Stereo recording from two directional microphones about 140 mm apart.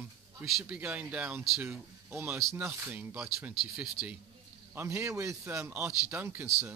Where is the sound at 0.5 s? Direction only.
5° right (ahead or behind).